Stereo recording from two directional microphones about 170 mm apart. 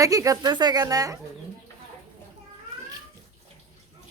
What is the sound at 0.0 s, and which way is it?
A woman's voice, 20° right (ahead or behind).